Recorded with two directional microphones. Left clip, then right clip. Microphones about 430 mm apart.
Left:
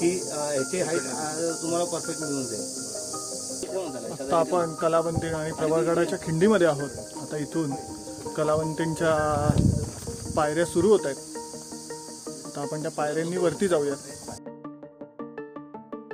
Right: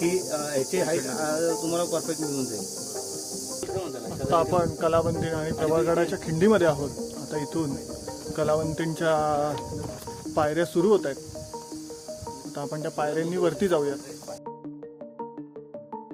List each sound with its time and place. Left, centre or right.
0.0 s speech: centre
4.1 s speech: centre
12.5 s speech: centre